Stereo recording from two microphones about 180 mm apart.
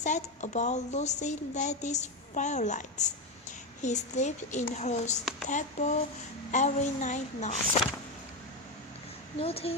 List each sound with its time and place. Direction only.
0.0 s a woman's voice: 40° left (ahead or behind)
9.4 s a woman's voice: 35° left (ahead or behind)